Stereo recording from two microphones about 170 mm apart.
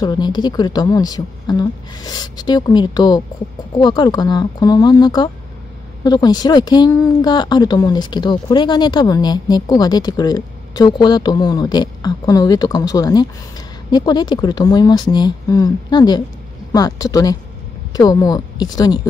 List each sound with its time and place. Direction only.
0.0 s speech: 25° left (ahead or behind)